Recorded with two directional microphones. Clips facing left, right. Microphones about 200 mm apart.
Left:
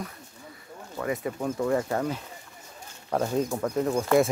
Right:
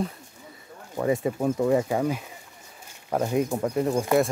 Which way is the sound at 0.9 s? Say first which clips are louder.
Right 5 dB; 25° right (ahead or behind).